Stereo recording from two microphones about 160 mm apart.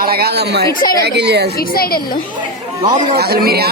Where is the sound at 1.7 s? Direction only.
70° left (ahead or behind).